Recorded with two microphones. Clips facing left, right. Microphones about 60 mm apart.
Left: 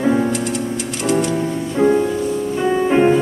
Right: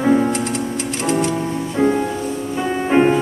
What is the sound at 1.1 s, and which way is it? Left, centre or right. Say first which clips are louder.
Music: left 1 dB; right.